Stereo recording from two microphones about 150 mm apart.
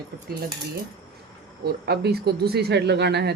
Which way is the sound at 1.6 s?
90° right.